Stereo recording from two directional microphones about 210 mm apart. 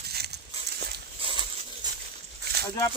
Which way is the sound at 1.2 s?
20° right (ahead or behind).